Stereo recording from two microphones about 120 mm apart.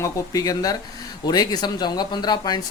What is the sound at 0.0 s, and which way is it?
Speech, 30° left (ahead or behind).